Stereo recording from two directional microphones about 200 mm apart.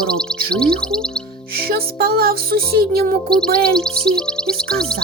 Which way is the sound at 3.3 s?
5° left (ahead or behind).